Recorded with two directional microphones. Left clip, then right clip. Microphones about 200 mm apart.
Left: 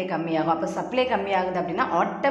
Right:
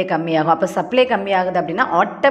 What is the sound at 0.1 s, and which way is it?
A woman's voice, 30° right (ahead or behind).